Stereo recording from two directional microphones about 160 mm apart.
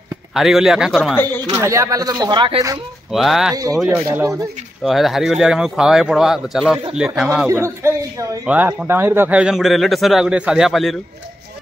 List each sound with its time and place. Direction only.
0.3 s speech: centre (ahead or behind)
1.1 s speech: 10° left (ahead or behind)
1.5 s speech: 20° right (ahead or behind)
3.1 s speech: centre (ahead or behind)
3.5 s speech: 20° right (ahead or behind)
4.8 s speech: centre (ahead or behind)
7.4 s a man's voice: 15° right (ahead or behind); by 11.0 s centre (ahead or behind)